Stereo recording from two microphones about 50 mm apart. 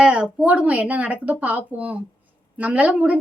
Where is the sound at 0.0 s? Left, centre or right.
Centre.